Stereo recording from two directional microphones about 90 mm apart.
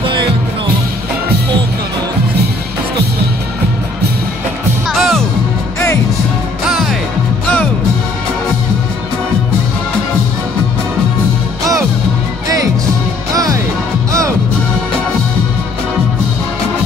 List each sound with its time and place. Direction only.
0.0 s music: 65° right (ahead or behind)
4.8 s music: centre (ahead or behind)
6.7 s music: centre (ahead or behind)
13.3 s music: 45° right (ahead or behind)